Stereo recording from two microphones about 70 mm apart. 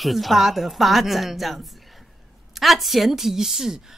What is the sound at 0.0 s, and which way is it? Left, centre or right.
Speech, centre.